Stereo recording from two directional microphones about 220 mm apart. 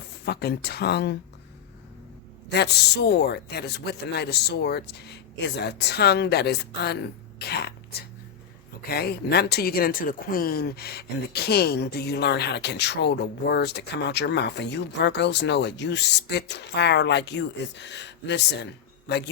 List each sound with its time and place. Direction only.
0.3 s speech: 45° left (ahead or behind)
2.5 s speech: 50° left (ahead or behind)
8.9 s speech: 45° left (ahead or behind)